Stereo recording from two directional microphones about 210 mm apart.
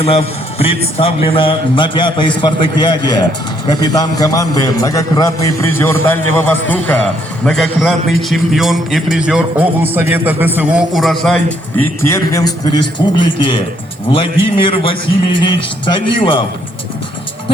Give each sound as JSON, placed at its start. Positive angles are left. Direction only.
{"t": 0.0, "sound": "a man's voice", "side_deg": 25}
{"t": 14.6, "sound": "a man's voice", "side_deg": 25}